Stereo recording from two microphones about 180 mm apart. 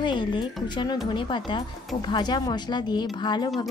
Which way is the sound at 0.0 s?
25° left (ahead or behind).